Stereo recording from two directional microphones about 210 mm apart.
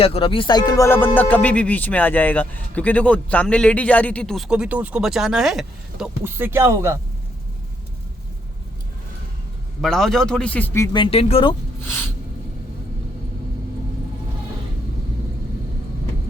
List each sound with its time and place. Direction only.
0.0 s speech: 25° left (ahead or behind); by 7.0 s 15° right (ahead or behind)
9.8 s speech: centre (ahead or behind)
10.9 s speech: 25° left (ahead or behind)
11.8 s a sound: 10° left (ahead or behind)